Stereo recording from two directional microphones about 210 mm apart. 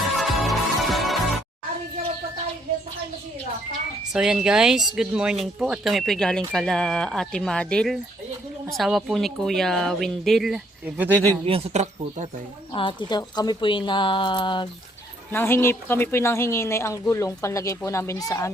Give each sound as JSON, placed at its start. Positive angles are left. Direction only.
{"t": 0.0, "sound": "music", "side_deg": 0}
{"t": 4.1, "sound": "speech", "side_deg": -5}
{"t": 11.4, "sound": "speech", "side_deg": -30}
{"t": 12.7, "sound": "speech", "side_deg": 25}
{"t": 15.3, "sound": "speech", "side_deg": 10}